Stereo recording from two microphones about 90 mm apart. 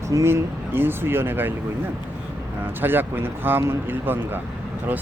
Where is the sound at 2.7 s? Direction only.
20° right (ahead or behind).